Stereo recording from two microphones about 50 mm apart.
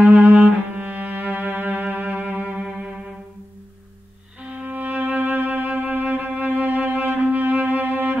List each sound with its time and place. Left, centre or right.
0.0 s cello: right
4.6 s music: right